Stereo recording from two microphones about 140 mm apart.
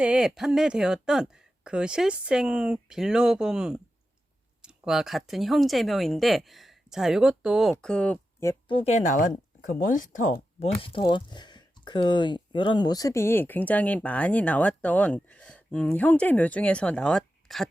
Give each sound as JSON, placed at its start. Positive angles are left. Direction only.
{"t": 0.0, "sound": "speech", "side_deg": -5}
{"t": 8.6, "sound": "speech", "side_deg": 40}
{"t": 8.9, "sound": "speech", "side_deg": 60}
{"t": 10.6, "sound": "speech", "side_deg": 40}